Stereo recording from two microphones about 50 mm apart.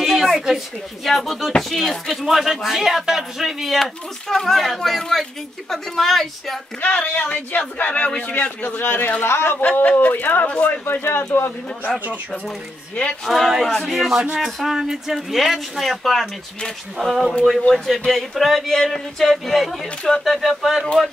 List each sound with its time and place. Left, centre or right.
0.0 s a sound: centre
1.0 s speech: centre
6.8 s a man's voice: left
8.8 s a man's voice: left
9.9 s a man's voice: left
13.2 s speech: centre
13.9 s speech: centre
20.8 s speech: centre